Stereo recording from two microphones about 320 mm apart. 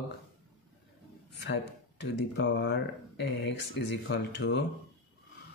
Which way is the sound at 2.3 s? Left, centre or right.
Left.